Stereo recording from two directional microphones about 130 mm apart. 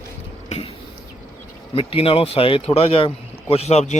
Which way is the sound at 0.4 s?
55° left (ahead or behind).